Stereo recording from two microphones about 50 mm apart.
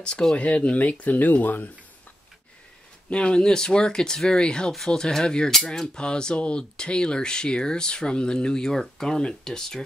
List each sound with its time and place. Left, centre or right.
0.4 s speech: left
3.1 s cutlery: left